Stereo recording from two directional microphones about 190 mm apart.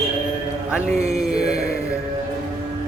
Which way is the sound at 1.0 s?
35° right (ahead or behind).